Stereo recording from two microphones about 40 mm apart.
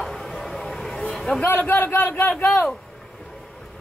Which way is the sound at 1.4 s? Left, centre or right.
Left.